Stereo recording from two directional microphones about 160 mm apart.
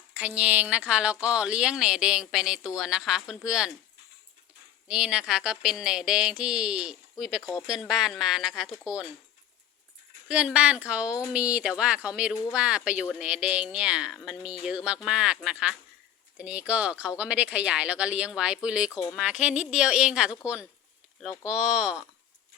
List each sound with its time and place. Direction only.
0.2 s speech: 10° right (ahead or behind)
4.9 s speech: 5° right (ahead or behind)
10.2 s speech: 5° right (ahead or behind)
18.9 s speech: 25° left (ahead or behind)
19.1 s speech: 5° right (ahead or behind)